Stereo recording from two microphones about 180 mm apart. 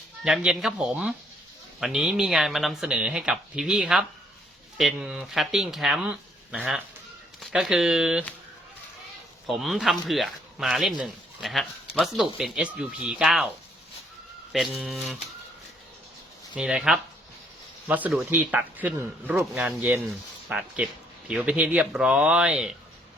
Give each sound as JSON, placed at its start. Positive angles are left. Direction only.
{"t": 0.3, "sound": "speech", "side_deg": -5}
{"t": 9.5, "sound": "speech", "side_deg": 0}
{"t": 14.8, "sound": "speech", "side_deg": 0}
{"t": 16.6, "sound": "speech", "side_deg": -5}